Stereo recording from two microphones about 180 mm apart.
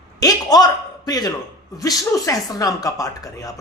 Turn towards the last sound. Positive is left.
turn(degrees=20)  # may be behind; listen again after turning